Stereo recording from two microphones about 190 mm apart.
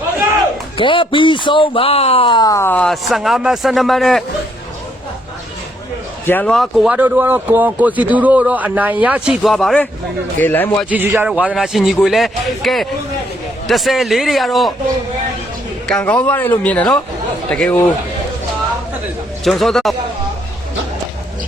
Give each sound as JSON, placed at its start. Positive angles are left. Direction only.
{"t": 0.8, "sound": "speech", "side_deg": 25}
{"t": 6.2, "sound": "a man's voice", "side_deg": 10}
{"t": 10.8, "sound": "a man's voice", "side_deg": -10}
{"t": 16.0, "sound": "speech", "side_deg": 5}
{"t": 19.5, "sound": "a man's voice", "side_deg": 0}